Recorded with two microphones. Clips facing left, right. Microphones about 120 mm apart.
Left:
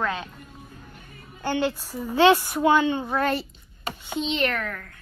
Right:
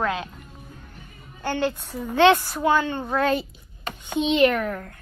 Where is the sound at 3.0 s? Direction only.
5° left (ahead or behind).